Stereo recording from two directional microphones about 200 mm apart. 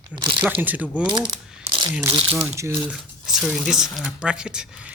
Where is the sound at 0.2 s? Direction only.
25° right (ahead or behind).